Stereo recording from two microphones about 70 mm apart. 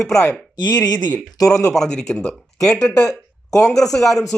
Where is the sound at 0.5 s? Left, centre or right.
Left.